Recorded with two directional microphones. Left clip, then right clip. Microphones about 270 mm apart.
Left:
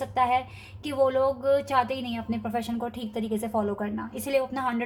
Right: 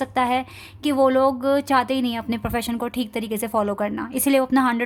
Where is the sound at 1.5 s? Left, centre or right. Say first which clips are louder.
Right 4 dB; right.